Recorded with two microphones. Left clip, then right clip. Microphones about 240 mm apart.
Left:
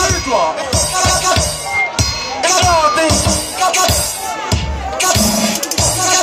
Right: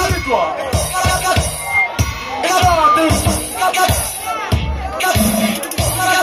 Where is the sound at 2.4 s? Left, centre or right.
Left.